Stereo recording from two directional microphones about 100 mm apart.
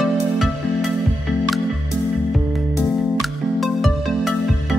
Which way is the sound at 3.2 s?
Centre (ahead or behind).